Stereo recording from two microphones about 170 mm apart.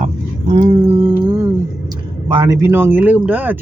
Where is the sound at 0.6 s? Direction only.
35° right (ahead or behind).